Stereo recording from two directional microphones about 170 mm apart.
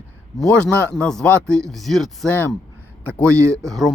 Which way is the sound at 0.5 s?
10° left (ahead or behind).